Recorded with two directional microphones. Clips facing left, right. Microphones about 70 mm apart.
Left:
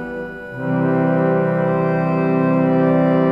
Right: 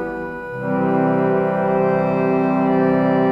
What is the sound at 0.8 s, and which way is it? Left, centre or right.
Music, left.